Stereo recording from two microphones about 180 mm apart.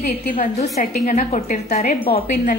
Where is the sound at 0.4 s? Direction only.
40° left (ahead or behind).